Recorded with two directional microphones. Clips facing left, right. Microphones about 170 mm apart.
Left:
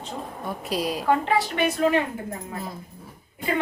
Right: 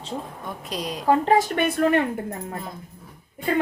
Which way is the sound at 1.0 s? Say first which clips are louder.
Right 6 dB; 40° right (ahead or behind).